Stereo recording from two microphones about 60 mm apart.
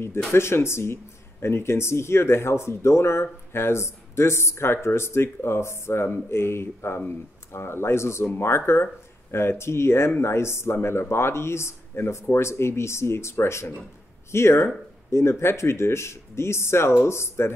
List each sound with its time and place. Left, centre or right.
0.3 s speech: left